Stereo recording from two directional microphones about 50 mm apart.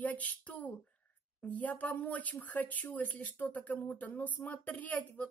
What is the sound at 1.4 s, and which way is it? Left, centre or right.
Speech, left.